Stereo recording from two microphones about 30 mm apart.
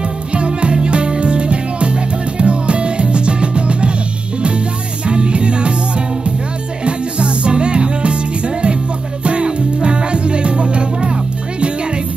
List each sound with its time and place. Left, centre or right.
0.3 s music: right
5.0 s music: right
9.2 s music: right